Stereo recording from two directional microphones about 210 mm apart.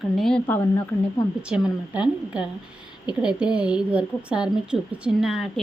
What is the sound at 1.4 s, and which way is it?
Speech, 5° right (ahead or behind).